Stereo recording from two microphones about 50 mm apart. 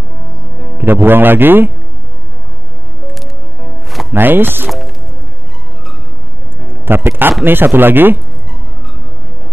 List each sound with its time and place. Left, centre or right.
1.0 s speech: right
3.2 s music: centre
4.1 s speech: right
4.6 s music: centre
6.7 s speech: right